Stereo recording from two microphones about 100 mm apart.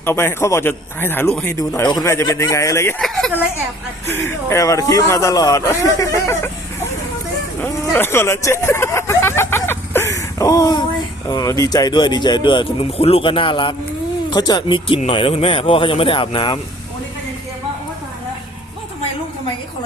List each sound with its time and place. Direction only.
0.0 s speech: 25° left (ahead or behind)
1.5 s speech: 35° left (ahead or behind)
2.0 s speech: 30° left (ahead or behind)
3.0 s speech: 5° left (ahead or behind)
4.0 s speech: 25° left (ahead or behind)
7.6 s hubbub: 20° left (ahead or behind); by 10.8 s 35° left (ahead or behind)
11.3 s speech: 40° left (ahead or behind); by 13.7 s 55° left (ahead or behind)
14.3 s speech: 40° left (ahead or behind)
14.8 s speech: 60° left (ahead or behind)